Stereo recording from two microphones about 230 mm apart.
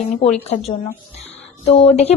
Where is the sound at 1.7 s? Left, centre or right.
Left.